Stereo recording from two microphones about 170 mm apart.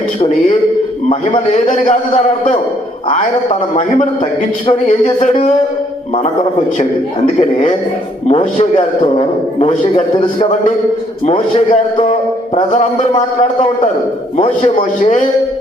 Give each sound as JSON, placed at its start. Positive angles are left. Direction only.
{"t": 1.7, "sound": "music", "side_deg": 45}
{"t": 4.6, "sound": "a man's voice", "side_deg": 40}
{"t": 7.3, "sound": "a man's voice", "side_deg": 40}
{"t": 11.3, "sound": "a man's voice", "side_deg": 40}
{"t": 12.7, "sound": "music", "side_deg": 45}
{"t": 14.3, "sound": "a man's voice", "side_deg": 40}